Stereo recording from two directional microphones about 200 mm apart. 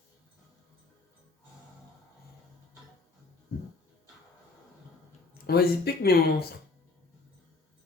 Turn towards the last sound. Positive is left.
turn(degrees=50)  # may be behind; listen again after turning